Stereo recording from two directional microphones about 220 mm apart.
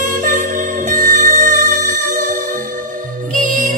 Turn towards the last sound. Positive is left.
turn(degrees=-35)  # may be behind; listen again after turning